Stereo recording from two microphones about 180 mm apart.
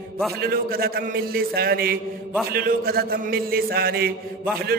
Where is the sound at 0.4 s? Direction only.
55° right (ahead or behind).